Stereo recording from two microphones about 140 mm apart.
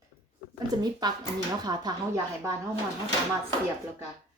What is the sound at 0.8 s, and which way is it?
A woman's voice, 30° right (ahead or behind).